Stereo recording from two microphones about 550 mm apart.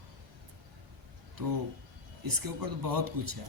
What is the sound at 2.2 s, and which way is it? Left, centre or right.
A man's voice, right.